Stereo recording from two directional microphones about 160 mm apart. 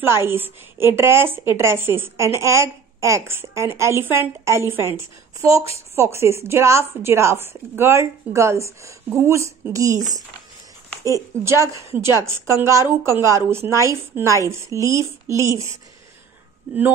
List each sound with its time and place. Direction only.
0.0 s a woman's voice: 15° right (ahead or behind)
11.1 s a woman's voice: 20° right (ahead or behind)